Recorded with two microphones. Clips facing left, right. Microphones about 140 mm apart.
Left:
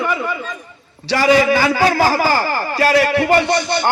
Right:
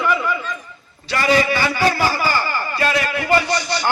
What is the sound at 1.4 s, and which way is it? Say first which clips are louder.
Speech: left 4 dB; 90° left.